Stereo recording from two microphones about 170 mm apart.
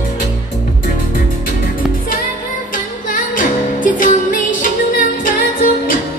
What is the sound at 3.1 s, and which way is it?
Music, 50° left (ahead or behind).